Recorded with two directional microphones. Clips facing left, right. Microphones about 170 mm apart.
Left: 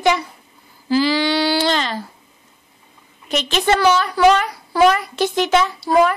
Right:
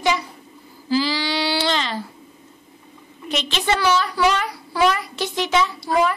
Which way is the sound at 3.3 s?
45° left (ahead or behind).